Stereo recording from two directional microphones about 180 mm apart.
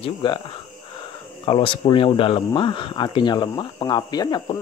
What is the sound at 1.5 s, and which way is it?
Speech, 30° left (ahead or behind).